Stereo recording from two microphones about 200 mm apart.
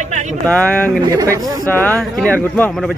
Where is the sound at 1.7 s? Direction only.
10° left (ahead or behind).